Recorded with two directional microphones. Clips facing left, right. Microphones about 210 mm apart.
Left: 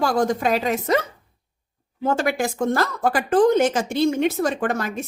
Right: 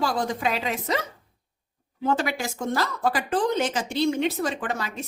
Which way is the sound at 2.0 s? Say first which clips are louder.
Left 4 dB; 50° left (ahead or behind).